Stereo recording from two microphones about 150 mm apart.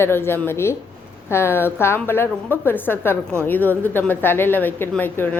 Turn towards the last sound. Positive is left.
turn(degrees=15)  # may be behind; listen again after turning